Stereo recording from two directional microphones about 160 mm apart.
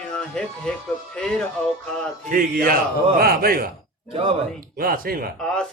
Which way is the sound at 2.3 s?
60° right (ahead or behind).